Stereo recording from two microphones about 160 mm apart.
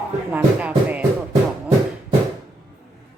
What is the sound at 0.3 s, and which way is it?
Music, 10° right (ahead or behind).